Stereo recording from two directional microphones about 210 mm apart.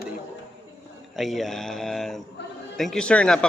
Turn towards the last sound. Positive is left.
turn(degrees=5)  # may be behind; listen again after turning